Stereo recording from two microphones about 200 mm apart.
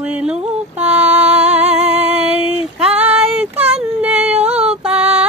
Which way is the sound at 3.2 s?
5° right (ahead or behind).